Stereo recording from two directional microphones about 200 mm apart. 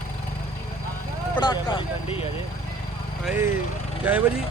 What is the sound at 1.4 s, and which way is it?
Speech, 25° left (ahead or behind).